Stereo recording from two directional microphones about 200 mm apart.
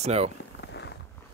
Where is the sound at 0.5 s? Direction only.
60° left (ahead or behind).